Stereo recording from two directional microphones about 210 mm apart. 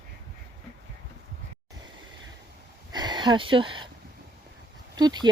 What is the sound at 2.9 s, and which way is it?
Speech, 20° right (ahead or behind).